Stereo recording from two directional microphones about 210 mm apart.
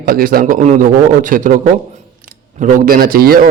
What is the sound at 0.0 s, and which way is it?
A man's voice, 45° right (ahead or behind).